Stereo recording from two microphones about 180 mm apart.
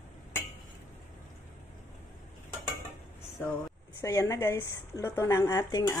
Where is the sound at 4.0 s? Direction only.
15° left (ahead or behind).